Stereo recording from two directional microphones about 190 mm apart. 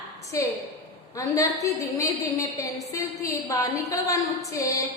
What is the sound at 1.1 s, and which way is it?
A woman's voice, 15° left (ahead or behind).